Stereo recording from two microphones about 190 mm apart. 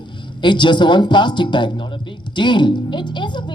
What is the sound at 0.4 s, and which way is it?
A woman's voice, 25° left (ahead or behind).